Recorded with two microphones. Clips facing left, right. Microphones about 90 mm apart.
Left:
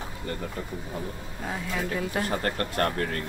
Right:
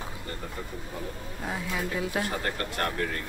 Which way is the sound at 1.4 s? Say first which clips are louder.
Left 1 dB; centre (ahead or behind).